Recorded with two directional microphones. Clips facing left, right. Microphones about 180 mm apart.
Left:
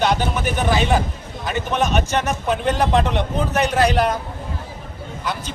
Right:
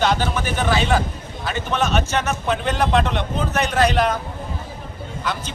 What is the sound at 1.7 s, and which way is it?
A man's voice, 15° left (ahead or behind).